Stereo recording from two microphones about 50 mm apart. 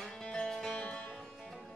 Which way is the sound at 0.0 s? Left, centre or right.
Centre.